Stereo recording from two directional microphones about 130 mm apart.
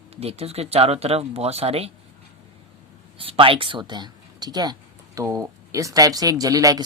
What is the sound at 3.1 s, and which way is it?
Speech, 45° right (ahead or behind).